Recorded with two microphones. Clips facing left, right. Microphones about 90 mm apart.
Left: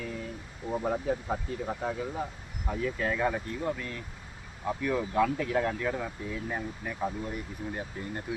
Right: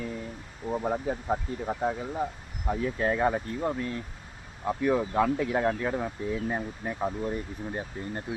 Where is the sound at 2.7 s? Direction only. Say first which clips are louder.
Right 3 dB; 35° right (ahead or behind).